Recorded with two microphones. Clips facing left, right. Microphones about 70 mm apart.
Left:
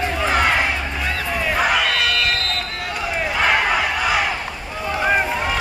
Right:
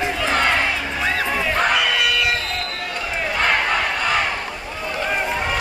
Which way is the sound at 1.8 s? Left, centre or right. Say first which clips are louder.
Even; centre.